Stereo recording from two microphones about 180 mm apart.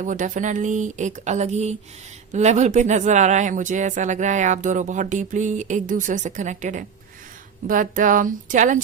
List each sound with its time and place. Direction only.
0.0 s speech: 45° right (ahead or behind)